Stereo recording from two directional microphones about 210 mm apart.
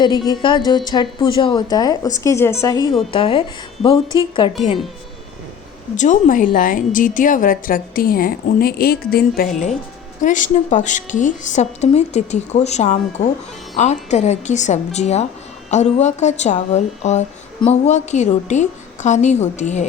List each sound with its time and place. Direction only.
0.0 s a woman's voice: 20° left (ahead or behind)
3.1 s a woman's voice: 25° left (ahead or behind)
6.0 s a woman's voice: 40° left (ahead or behind)